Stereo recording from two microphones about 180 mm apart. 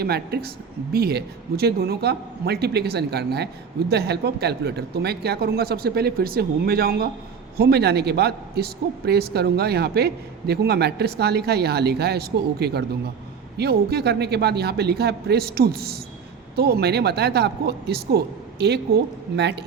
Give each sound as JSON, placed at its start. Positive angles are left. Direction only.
{"t": 0.0, "sound": "a man's voice", "side_deg": -60}